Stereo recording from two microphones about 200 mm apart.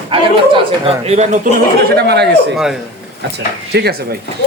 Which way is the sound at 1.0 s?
35° right (ahead or behind).